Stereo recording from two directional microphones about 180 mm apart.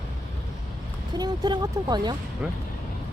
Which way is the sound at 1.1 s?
25° right (ahead or behind).